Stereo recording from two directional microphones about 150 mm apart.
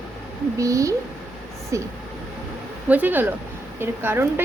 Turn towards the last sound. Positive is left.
turn(degrees=-15)  # may be behind; listen again after turning